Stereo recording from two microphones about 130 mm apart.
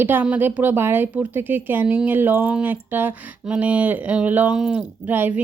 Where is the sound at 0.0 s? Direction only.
15° right (ahead or behind).